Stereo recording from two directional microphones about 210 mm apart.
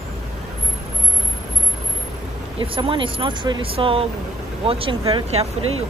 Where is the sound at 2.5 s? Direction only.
25° right (ahead or behind).